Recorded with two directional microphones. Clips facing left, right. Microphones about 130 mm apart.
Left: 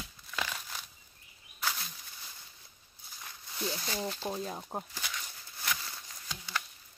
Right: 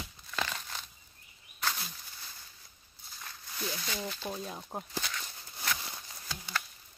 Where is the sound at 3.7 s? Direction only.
30° left (ahead or behind).